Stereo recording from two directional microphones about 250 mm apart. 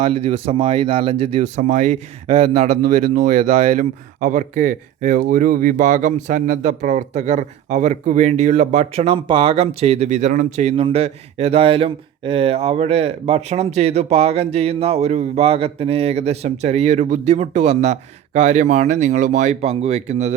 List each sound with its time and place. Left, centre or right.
0.0 s speech: right